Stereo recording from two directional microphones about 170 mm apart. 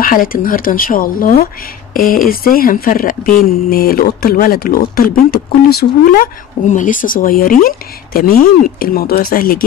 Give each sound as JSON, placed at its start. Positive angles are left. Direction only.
{"t": 0.0, "sound": "speech", "side_deg": 55}